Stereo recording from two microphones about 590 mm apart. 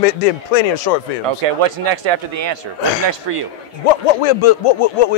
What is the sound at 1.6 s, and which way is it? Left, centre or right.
Speech, right.